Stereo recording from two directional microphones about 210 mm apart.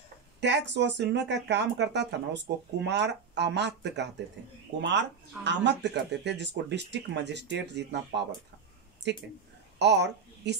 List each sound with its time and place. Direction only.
0.4 s a woman's voice: 55° right (ahead or behind)